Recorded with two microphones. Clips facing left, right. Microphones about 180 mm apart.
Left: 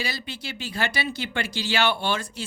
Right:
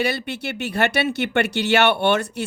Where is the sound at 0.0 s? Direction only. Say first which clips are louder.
Right 9 dB; 65° right (ahead or behind).